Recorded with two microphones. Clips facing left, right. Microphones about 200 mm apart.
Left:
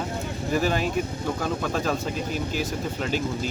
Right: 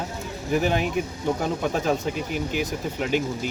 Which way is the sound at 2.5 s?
15° right (ahead or behind).